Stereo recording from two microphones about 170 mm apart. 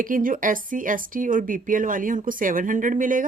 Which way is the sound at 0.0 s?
55° right (ahead or behind).